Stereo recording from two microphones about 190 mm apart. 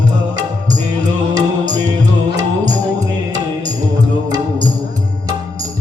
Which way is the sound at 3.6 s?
20° right (ahead or behind).